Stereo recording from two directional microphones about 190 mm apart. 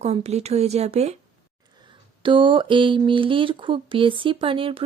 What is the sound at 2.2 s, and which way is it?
Speech, 25° right (ahead or behind).